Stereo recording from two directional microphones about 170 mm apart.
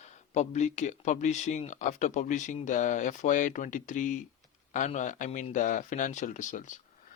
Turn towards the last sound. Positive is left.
turn(degrees=50)  # may be behind; listen again after turning